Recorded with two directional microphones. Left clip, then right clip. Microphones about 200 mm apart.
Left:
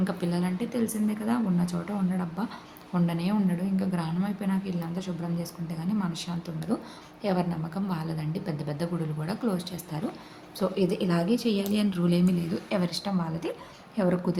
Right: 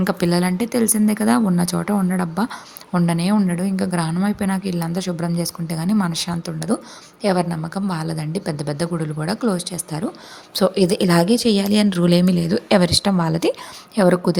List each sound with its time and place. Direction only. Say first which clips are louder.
0.0 s a woman's voice: right 11 dB; 40° right (ahead or behind)